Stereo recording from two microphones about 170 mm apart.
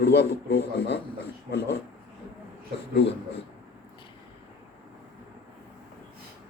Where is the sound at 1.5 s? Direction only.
80° left.